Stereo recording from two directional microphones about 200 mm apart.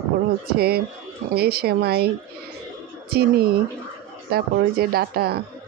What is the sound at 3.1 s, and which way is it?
Speech, 50° right (ahead or behind).